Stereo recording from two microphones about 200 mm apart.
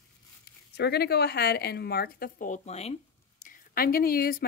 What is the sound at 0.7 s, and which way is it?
Speech, 55° left (ahead or behind).